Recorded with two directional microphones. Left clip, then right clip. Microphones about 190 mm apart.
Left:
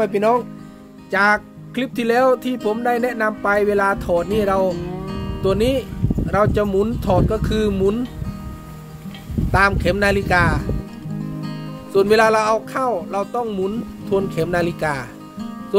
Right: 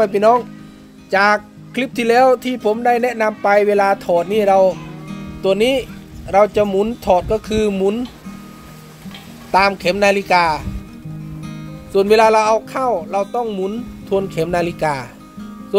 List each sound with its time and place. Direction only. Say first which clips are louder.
0.0 s speech: right 4 dB; centre (ahead or behind)
9.5 s speech: right 3 dB; centre (ahead or behind)
11.9 s speech: right 3 dB; centre (ahead or behind)